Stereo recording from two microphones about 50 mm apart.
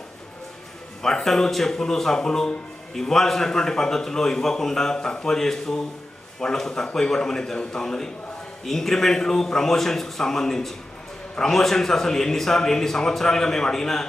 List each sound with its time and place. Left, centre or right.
1.0 s speech: centre